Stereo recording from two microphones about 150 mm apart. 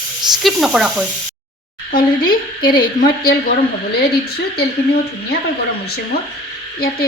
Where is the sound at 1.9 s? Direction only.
70° left (ahead or behind).